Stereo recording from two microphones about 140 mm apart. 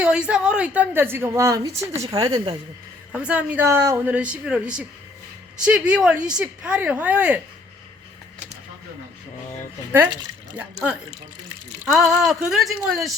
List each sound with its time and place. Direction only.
0.0 s a woman's voice: 5° right (ahead or behind); by 2.6 s 35° right (ahead or behind)
3.1 s a woman's voice: 10° right (ahead or behind)
11.9 s speech: centre (ahead or behind)